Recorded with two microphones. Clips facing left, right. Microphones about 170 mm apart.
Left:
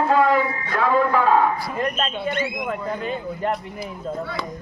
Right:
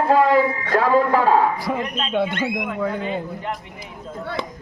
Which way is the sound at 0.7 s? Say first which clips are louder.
Right 2 dB; 35° right (ahead or behind).